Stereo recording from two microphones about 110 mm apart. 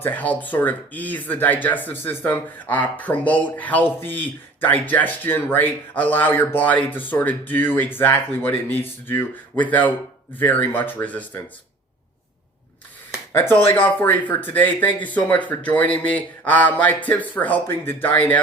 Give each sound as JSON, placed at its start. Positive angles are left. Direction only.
{"t": 0.0, "sound": "speech", "side_deg": 15}
{"t": 13.3, "sound": "speech", "side_deg": 20}